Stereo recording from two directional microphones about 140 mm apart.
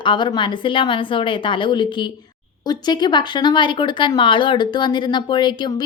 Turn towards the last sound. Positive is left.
turn(degrees=30)  # may be behind; listen again after turning